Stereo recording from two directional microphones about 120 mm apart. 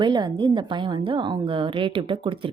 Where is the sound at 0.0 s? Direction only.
40° right (ahead or behind).